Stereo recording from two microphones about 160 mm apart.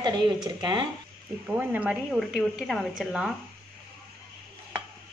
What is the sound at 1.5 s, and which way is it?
A woman's voice, 10° right (ahead or behind).